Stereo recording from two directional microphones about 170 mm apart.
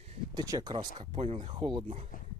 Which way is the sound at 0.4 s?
20° right (ahead or behind).